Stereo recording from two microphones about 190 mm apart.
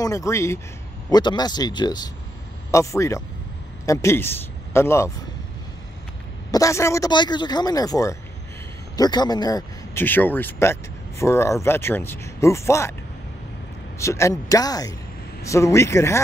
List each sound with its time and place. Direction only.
0.0 s speech: 15° left (ahead or behind)
6.5 s speech: 15° left (ahead or behind)
13.9 s speech: 15° left (ahead or behind)